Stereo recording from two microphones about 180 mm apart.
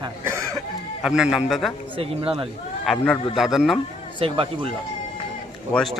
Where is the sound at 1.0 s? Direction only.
5° right (ahead or behind).